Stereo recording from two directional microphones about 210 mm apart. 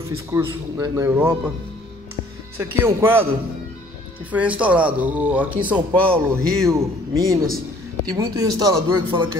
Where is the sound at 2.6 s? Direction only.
15° right (ahead or behind).